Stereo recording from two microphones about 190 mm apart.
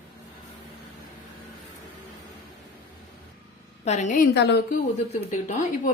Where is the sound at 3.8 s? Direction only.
35° left (ahead or behind).